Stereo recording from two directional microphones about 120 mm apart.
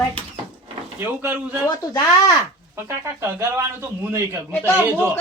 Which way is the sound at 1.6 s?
30° left (ahead or behind).